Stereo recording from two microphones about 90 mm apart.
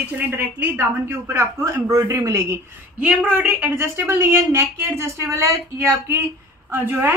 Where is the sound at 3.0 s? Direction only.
15° right (ahead or behind); by 5.4 s 30° right (ahead or behind).